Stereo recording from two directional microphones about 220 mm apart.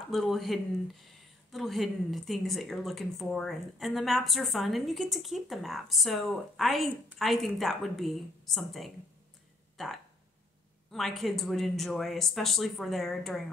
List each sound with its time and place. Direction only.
0.1 s speech: centre (ahead or behind)